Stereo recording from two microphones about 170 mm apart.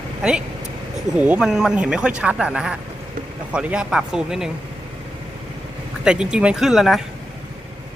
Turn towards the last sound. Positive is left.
turn(degrees=0)  # may be behind; listen again after turning